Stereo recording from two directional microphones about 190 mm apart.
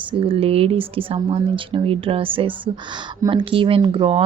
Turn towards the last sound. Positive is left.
turn(degrees=-25)  # may be behind; listen again after turning